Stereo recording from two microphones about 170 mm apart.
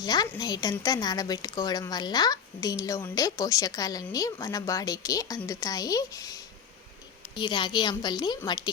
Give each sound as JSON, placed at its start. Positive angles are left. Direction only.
{"t": 0.0, "sound": "speech", "side_deg": 25}